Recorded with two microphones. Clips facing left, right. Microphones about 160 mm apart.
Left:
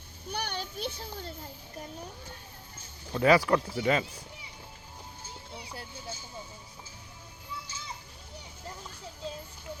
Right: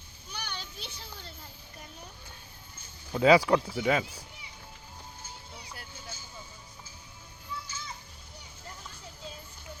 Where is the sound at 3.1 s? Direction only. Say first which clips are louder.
Right 2 dB; 15° right (ahead or behind).